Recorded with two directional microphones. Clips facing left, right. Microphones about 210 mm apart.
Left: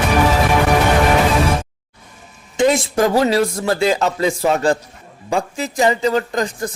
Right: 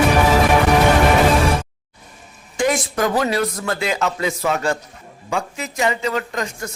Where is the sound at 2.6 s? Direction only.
25° left (ahead or behind).